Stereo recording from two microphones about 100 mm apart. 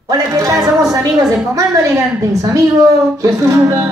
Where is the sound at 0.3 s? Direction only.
35° right (ahead or behind).